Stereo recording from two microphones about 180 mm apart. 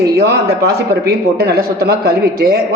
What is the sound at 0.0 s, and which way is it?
Speech, 65° right (ahead or behind).